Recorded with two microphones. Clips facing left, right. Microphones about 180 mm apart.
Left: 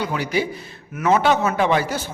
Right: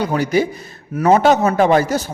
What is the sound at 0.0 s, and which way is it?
A man's voice, 45° right (ahead or behind).